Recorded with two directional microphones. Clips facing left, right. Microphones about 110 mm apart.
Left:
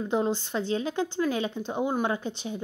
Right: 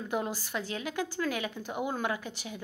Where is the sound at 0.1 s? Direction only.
25° left (ahead or behind).